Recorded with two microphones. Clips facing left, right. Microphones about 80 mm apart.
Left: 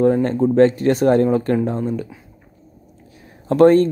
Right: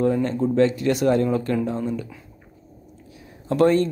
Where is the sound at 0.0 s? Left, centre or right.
Left.